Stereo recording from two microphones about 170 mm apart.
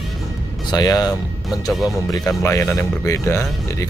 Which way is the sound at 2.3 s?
15° left (ahead or behind).